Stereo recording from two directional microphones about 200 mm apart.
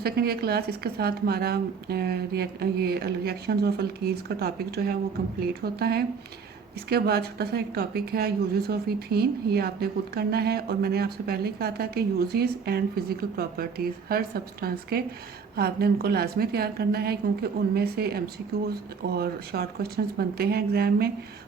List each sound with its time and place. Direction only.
0.0 s speech: 50° right (ahead or behind)